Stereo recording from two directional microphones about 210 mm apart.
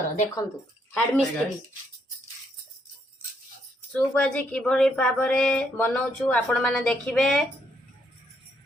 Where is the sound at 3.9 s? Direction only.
5° left (ahead or behind).